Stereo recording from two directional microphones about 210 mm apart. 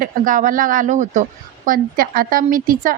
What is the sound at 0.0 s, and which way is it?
Speech, 40° right (ahead or behind).